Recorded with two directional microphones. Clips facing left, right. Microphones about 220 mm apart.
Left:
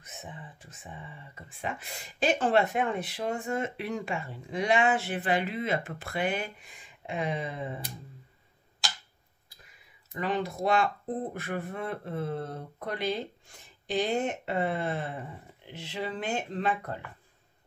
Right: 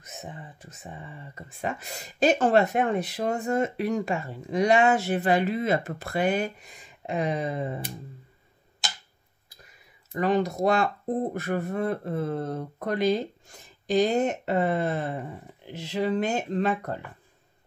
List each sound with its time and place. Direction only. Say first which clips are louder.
0.0 s a sound: right 4 dB; 40° right (ahead or behind)
1.6 s speech: right 4 dB; 40° right (ahead or behind)
10.1 s speech: right 7 dB; 45° right (ahead or behind)